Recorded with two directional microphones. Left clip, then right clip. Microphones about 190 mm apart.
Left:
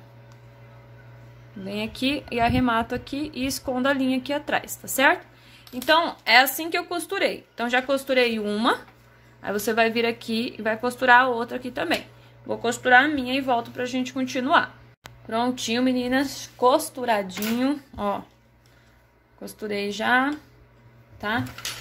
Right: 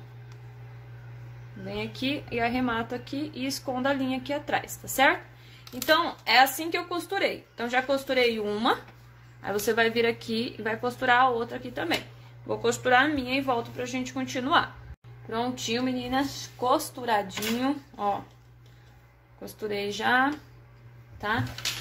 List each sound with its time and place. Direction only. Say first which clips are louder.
1.7 s speech: left 4 dB; 25° left (ahead or behind)
12.4 s speech: left 4 dB; 20° left (ahead or behind)
19.4 s speech: left 2 dB; 20° left (ahead or behind)